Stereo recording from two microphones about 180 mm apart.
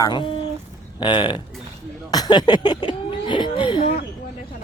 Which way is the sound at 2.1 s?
20° left (ahead or behind).